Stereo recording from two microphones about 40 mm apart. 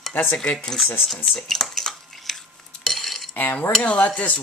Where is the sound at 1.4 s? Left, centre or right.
Centre.